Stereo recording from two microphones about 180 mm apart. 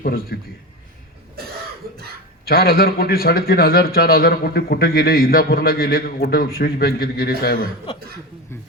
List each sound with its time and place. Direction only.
0.0 s a man's voice: 55° left (ahead or behind)
2.5 s a man's voice: 55° left (ahead or behind)